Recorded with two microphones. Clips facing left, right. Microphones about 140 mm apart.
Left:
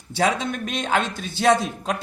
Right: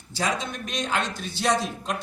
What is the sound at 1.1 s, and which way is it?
Speech, 55° left (ahead or behind).